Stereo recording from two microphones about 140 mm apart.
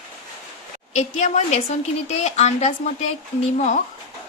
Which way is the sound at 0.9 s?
55° left (ahead or behind).